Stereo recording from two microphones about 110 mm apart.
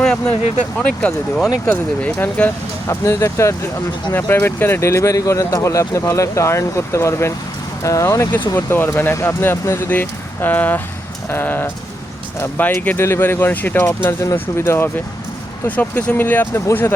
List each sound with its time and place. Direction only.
0.8 s speech: 10° left (ahead or behind)
2.8 s speech: 25° left (ahead or behind)